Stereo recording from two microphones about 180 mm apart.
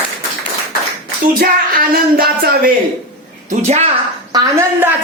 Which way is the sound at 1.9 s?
55° right (ahead or behind).